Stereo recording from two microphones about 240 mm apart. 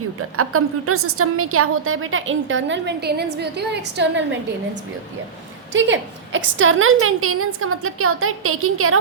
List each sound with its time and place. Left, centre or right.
0.2 s a woman's voice: right
5.7 s a woman's voice: right